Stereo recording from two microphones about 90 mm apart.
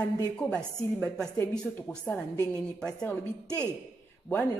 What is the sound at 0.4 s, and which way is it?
A woman's voice, 10° left (ahead or behind).